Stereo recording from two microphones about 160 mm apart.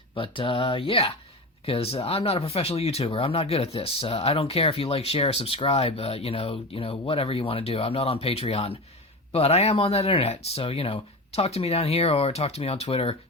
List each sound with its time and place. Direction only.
0.1 s speech: 30° left (ahead or behind)